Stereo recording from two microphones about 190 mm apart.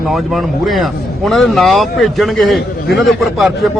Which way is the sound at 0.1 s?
Centre (ahead or behind).